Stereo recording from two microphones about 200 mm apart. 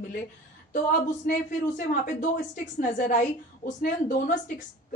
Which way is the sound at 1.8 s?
45° left (ahead or behind).